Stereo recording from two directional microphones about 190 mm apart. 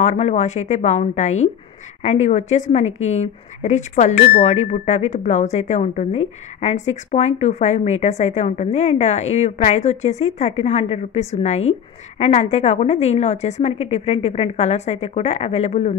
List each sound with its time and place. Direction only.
0.0 s speech: 35° left (ahead or behind)
4.1 s speech: 50° left (ahead or behind)
4.4 s speech: 35° left (ahead or behind)